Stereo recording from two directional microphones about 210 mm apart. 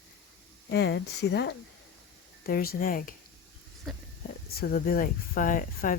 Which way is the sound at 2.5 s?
45° left (ahead or behind).